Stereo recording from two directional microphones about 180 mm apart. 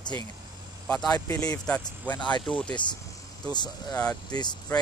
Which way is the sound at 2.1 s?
25° left (ahead or behind).